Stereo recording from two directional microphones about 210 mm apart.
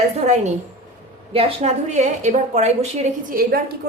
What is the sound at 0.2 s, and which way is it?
A woman's voice, 35° right (ahead or behind).